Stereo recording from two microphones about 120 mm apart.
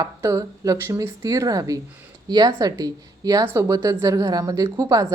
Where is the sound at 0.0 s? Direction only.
25° right (ahead or behind).